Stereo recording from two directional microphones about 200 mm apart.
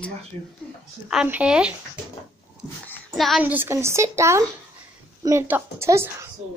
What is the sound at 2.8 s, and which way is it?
A child's voice, centre (ahead or behind).